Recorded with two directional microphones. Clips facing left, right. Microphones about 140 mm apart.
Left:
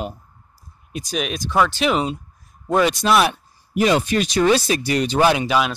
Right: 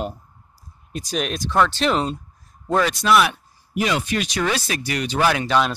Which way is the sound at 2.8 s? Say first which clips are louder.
Left 1 dB; 30° left (ahead or behind).